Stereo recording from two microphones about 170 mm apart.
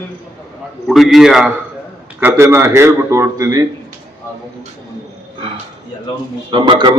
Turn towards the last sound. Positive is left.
turn(degrees=-30)  # may be behind; listen again after turning